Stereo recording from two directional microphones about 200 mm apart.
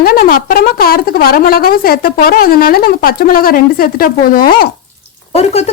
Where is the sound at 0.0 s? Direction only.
45° left (ahead or behind).